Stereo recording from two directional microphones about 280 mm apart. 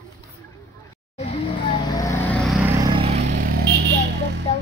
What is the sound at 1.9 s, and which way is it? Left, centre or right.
Vehicle, centre.